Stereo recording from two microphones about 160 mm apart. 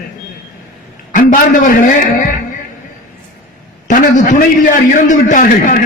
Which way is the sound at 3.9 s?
55° left (ahead or behind).